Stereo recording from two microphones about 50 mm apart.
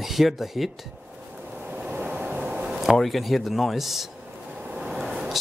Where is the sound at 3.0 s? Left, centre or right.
Centre.